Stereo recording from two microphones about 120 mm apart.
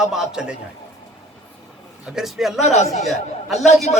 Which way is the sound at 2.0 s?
5° right (ahead or behind).